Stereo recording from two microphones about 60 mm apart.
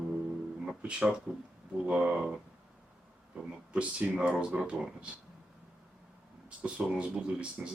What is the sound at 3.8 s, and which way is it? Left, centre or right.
Speech, centre.